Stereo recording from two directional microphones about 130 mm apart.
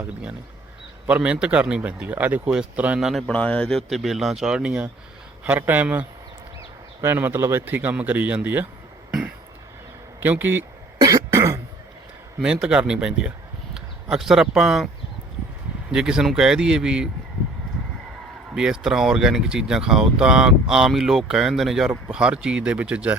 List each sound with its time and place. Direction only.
0.0 s speech: 10° right (ahead or behind)
10.2 s speech: 15° right (ahead or behind)
11.0 s cough: 25° right (ahead or behind)
12.4 s speech: 5° right (ahead or behind)
15.9 s speech: 5° right (ahead or behind)
18.5 s speech: 5° right (ahead or behind)